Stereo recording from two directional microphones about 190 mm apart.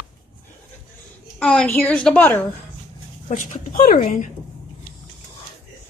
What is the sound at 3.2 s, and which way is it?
Speech, 45° left (ahead or behind).